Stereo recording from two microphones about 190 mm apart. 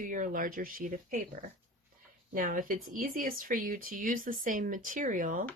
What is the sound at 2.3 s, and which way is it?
Speech, 45° right (ahead or behind).